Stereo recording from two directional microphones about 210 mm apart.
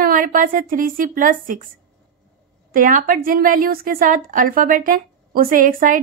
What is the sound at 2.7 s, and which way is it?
A woman's voice, 40° right (ahead or behind).